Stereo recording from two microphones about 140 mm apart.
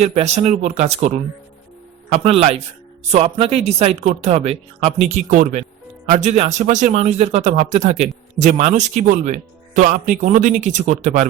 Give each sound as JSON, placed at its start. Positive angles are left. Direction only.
{"t": 0.0, "sound": "speech", "side_deg": -50}
{"t": 2.2, "sound": "a man's voice", "side_deg": -45}
{"t": 9.7, "sound": "a man's voice", "side_deg": -70}